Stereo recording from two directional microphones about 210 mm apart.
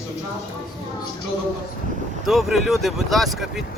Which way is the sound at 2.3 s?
Centre (ahead or behind).